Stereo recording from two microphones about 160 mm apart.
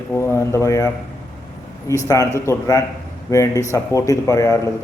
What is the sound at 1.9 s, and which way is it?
A man's voice, 20° left (ahead or behind).